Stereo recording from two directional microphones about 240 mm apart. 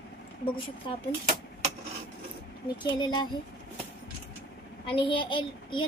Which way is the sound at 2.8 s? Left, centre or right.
Centre.